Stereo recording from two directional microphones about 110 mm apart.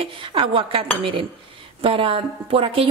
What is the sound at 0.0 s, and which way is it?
A woman's voice, 50° right (ahead or behind).